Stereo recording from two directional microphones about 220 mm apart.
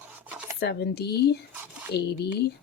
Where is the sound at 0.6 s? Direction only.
50° left (ahead or behind).